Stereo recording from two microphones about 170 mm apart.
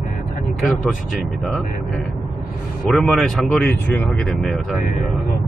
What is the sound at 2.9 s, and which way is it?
Speech, centre (ahead or behind).